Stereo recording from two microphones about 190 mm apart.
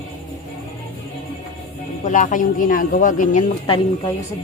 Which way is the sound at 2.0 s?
40° left (ahead or behind).